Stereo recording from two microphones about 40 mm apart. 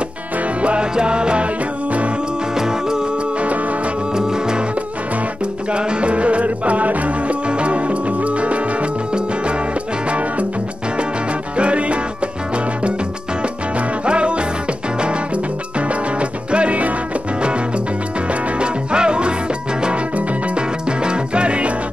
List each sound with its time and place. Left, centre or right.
0.6 s music: right
2.5 s music: centre
4.1 s music: centre
5.7 s music: right
11.5 s music: right
14.0 s music: right
16.2 s music: right
18.6 s music: right